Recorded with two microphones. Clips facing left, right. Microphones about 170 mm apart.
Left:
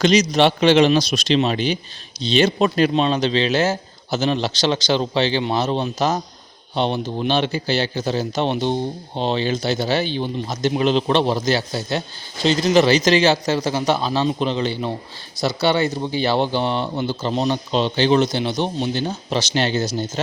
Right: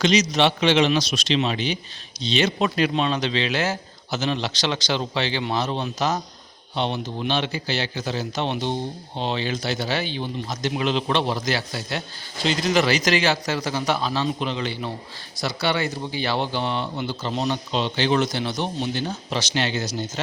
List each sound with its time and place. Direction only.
0.0 s speech: 35° left (ahead or behind)